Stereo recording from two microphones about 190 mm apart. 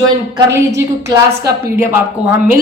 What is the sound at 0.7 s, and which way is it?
Speech, 60° right (ahead or behind).